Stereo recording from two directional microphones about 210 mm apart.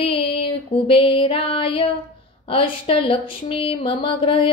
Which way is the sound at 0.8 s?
25° left (ahead or behind).